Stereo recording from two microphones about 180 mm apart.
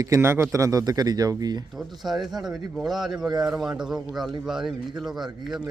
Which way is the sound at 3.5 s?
5° right (ahead or behind).